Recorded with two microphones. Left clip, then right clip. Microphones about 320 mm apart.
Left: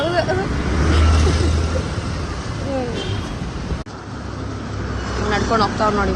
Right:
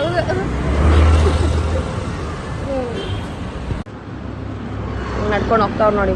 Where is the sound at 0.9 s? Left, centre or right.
Centre.